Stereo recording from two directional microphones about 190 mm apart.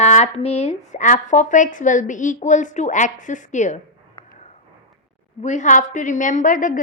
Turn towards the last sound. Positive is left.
turn(degrees=45)  # may be behind; listen again after turning